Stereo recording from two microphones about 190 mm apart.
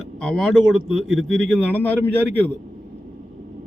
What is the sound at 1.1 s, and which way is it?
Speech, 80° right.